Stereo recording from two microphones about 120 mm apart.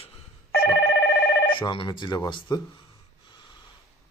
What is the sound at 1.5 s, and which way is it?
Speech, 45° left (ahead or behind).